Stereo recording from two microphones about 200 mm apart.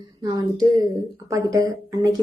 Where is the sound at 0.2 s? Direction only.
20° right (ahead or behind).